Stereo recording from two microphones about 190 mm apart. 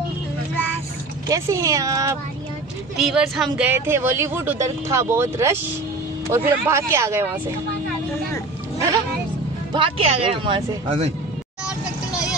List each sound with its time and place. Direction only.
1.3 s a woman's voice: 15° right (ahead or behind)
3.0 s a woman's voice: centre (ahead or behind)
9.7 s speech: 30° right (ahead or behind)
11.6 s vehicle: 5° right (ahead or behind)